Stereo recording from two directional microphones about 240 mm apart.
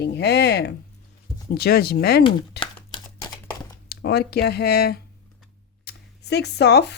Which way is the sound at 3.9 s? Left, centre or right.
Left.